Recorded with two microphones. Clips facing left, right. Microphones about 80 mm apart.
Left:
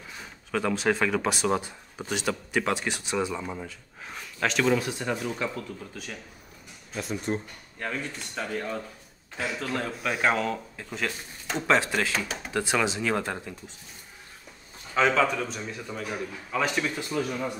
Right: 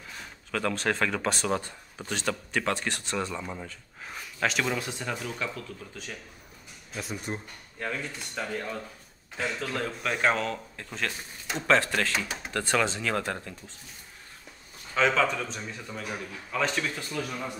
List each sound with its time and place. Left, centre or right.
0.2 s speech: centre
5.1 s speech: centre
7.0 s speech: centre
11.6 s speech: centre
15.0 s speech: centre